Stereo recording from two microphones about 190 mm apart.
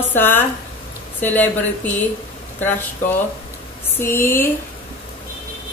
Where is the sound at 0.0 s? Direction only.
10° left (ahead or behind).